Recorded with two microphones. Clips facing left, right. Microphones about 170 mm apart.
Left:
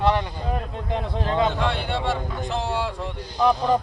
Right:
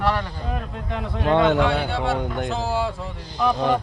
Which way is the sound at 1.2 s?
70° right (ahead or behind).